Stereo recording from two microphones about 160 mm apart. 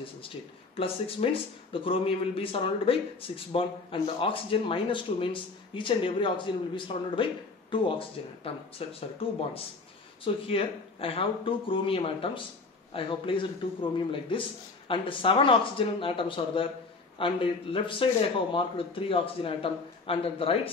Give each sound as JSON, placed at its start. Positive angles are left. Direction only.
{"t": 0.7, "sound": "speech", "side_deg": 35}